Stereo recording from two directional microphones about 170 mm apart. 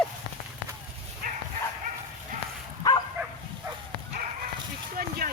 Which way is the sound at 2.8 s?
20° left (ahead or behind).